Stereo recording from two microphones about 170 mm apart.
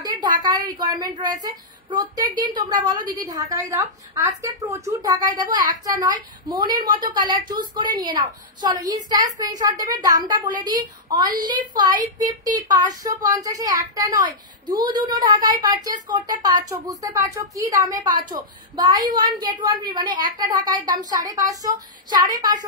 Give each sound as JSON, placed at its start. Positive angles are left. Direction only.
{"t": 0.0, "sound": "a woman's voice", "side_deg": -25}